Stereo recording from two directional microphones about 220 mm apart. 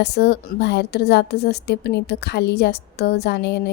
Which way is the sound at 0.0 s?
50° left (ahead or behind).